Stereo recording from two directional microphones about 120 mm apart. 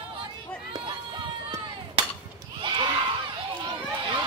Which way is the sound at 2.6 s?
40° right (ahead or behind).